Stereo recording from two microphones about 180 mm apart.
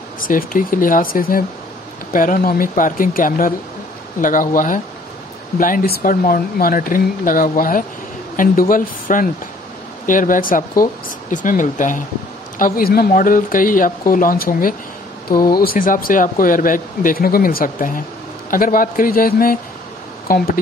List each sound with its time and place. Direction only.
0.2 s speech: 50° left (ahead or behind)